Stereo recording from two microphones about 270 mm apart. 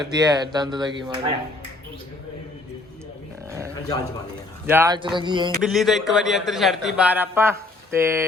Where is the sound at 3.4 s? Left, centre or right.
Centre.